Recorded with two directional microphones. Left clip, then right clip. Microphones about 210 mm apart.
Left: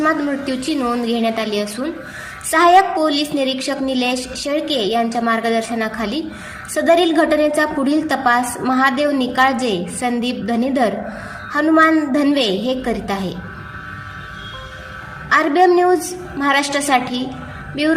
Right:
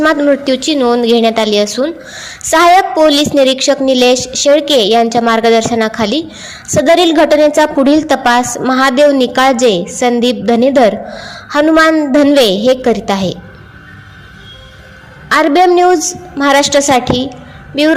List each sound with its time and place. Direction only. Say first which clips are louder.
0.0 s a woman's voice: right 8 dB; 40° right (ahead or behind)
15.3 s a woman's voice: right 5 dB; 40° right (ahead or behind)